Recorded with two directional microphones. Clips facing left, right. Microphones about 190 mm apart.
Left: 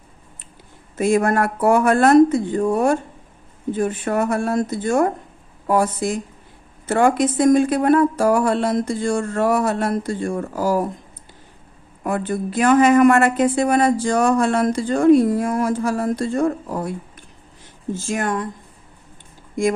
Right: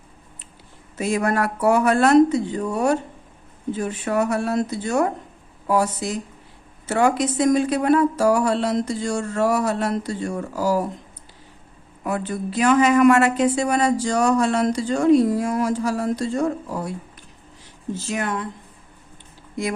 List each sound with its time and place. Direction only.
0.9 s speech: 50° left (ahead or behind)
12.0 s speech: 50° left (ahead or behind)
17.9 s speech: 45° left (ahead or behind)